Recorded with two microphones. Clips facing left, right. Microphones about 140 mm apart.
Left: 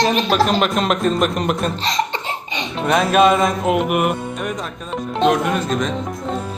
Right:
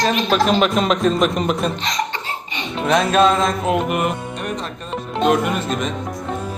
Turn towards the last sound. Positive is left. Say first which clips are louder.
# left 1 dB
turn(degrees=-5)  # may be behind; listen again after turning